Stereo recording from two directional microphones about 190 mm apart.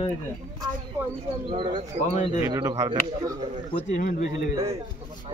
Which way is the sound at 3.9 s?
40° left (ahead or behind).